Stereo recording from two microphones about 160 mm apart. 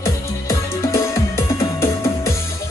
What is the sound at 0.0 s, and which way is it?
Music, 20° left (ahead or behind).